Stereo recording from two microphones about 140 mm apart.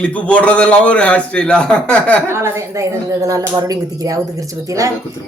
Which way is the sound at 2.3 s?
20° right (ahead or behind).